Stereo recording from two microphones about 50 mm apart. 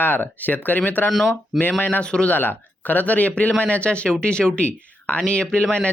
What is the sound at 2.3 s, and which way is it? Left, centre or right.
Speech, left.